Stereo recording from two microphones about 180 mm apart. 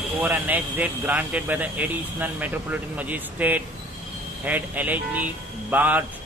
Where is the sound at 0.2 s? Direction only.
10° right (ahead or behind).